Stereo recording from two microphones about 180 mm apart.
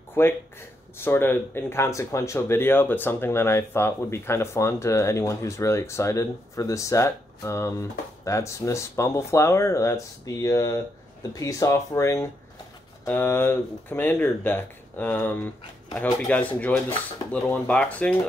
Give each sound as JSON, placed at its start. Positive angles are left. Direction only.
{"t": 0.2, "sound": "speech", "side_deg": 15}